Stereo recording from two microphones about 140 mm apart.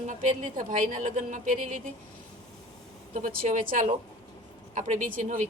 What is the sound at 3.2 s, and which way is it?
A woman's voice, 75° right (ahead or behind).